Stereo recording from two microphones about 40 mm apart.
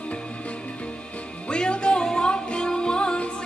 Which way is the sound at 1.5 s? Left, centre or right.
Left.